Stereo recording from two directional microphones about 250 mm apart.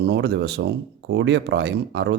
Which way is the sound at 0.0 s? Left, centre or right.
Right.